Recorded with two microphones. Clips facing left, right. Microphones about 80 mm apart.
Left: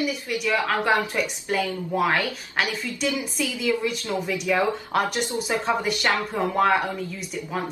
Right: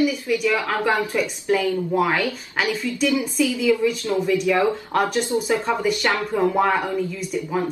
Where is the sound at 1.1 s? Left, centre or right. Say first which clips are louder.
Right 4 dB; centre.